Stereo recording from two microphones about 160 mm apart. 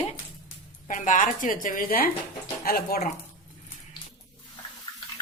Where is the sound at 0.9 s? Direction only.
55° left (ahead or behind).